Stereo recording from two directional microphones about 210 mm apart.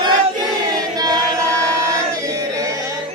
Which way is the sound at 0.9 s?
15° right (ahead or behind).